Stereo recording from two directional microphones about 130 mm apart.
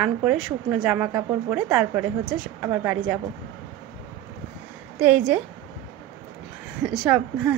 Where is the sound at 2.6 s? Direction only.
20° right (ahead or behind).